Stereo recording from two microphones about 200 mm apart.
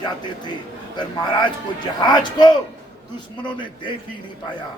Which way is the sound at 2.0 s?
20° left (ahead or behind).